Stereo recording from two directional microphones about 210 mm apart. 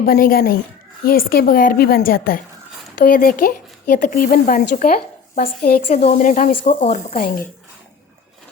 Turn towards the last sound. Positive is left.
turn(degrees=45)  # may be behind; listen again after turning